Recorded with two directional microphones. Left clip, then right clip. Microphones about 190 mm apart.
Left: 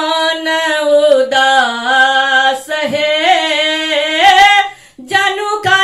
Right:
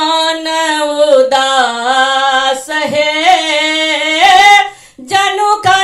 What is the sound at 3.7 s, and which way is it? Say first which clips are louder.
Singing: right 1 dB; 20° right (ahead or behind).